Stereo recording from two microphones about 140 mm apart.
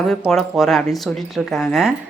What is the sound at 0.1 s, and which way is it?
Speech, 5° left (ahead or behind).